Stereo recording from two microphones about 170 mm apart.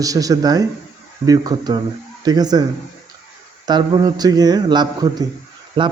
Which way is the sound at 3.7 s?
25° right (ahead or behind).